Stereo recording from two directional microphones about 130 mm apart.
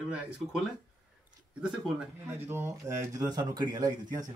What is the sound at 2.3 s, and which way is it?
Speech, 20° right (ahead or behind).